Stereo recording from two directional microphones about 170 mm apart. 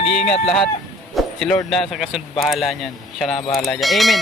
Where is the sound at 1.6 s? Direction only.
Centre (ahead or behind).